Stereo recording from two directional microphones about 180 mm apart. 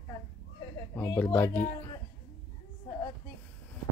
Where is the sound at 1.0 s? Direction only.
10° left (ahead or behind).